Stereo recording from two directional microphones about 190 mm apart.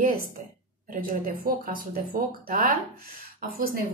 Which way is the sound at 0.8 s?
45° right (ahead or behind).